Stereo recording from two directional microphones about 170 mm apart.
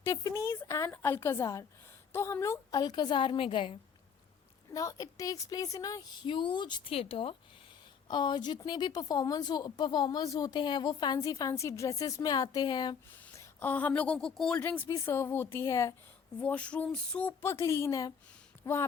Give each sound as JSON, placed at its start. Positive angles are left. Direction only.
{"t": 0.0, "sound": "a woman's voice", "side_deg": 15}
{"t": 4.7, "sound": "a woman's voice", "side_deg": 20}
{"t": 13.1, "sound": "a woman's voice", "side_deg": 10}